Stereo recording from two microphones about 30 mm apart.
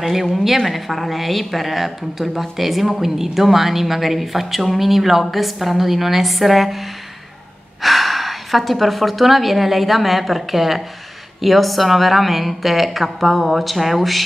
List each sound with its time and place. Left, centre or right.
0.0 s a woman's voice: centre
7.8 s a woman's voice: centre